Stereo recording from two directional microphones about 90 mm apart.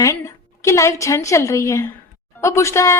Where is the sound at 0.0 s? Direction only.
35° left (ahead or behind).